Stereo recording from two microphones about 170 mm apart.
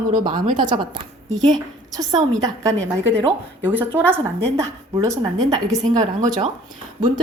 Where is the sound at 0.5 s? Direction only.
25° right (ahead or behind).